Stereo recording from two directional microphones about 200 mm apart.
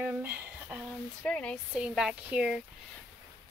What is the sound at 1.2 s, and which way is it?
Speech, 5° left (ahead or behind).